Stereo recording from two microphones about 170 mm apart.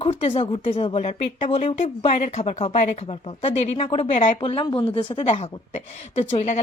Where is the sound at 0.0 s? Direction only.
35° left (ahead or behind).